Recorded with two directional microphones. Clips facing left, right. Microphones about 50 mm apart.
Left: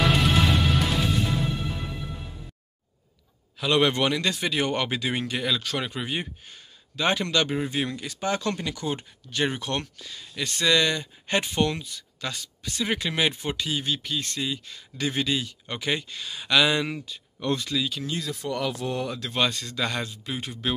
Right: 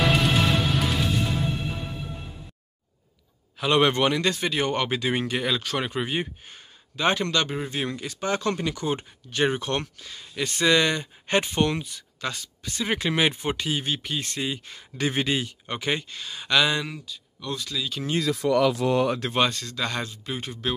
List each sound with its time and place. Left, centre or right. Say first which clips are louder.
0.0 s music: even; centre
3.5 s a man's voice: right 1 dB; centre
7.0 s speech: right 1 dB; centre
11.7 s speech: right 4 dB; centre
12.2 s speech: right 2 dB; centre; by 15.5 s right
15.6 s speech: right 1 dB; centre
17.0 s speech: left 5 dB; left
17.6 s speech: left 3 dB; centre
18.8 s speech: right 7 dB; right
19.5 s speech: even; centre